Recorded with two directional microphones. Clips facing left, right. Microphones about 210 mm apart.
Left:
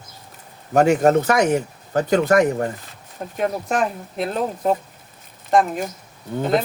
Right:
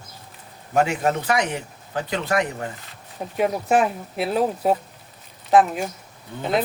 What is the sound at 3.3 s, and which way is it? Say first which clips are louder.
Speech: right 2 dB; 5° right (ahead or behind).